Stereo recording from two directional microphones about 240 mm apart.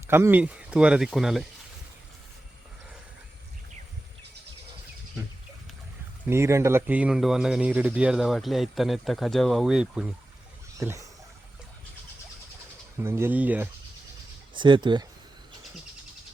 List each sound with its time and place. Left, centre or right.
0.1 s speech: centre
6.2 s speech: centre
13.0 s speech: centre
14.5 s speech: centre